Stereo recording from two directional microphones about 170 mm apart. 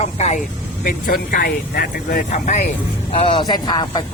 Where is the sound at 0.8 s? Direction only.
55° left (ahead or behind).